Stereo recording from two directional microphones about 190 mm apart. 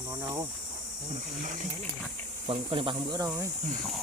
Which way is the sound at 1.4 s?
40° right (ahead or behind).